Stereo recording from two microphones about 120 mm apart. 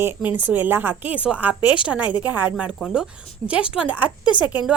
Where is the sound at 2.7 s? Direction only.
Centre (ahead or behind).